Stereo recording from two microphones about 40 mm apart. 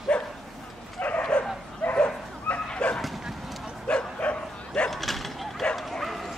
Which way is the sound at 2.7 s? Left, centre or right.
Left.